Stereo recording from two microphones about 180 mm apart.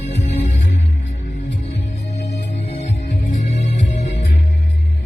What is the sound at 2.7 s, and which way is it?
Music, 35° left (ahead or behind).